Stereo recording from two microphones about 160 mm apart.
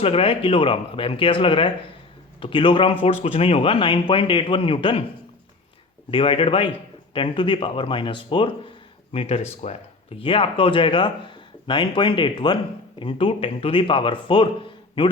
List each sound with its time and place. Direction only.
0.0 s speech: 35° left (ahead or behind)
6.1 s speech: 35° left (ahead or behind)